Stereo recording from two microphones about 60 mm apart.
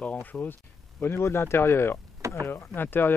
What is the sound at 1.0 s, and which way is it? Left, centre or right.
Speech, left.